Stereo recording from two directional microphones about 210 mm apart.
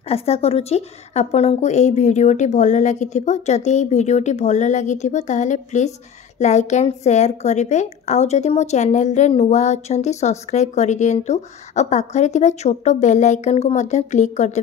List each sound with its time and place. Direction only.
0.1 s a woman's voice: 30° left (ahead or behind)